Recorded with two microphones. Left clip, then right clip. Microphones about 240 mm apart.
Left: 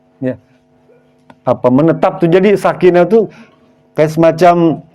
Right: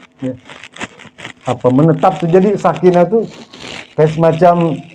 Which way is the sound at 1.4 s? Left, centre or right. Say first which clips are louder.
Left 2 dB; left.